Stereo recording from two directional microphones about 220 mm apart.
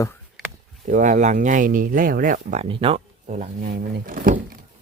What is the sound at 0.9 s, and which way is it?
Speech, 35° right (ahead or behind).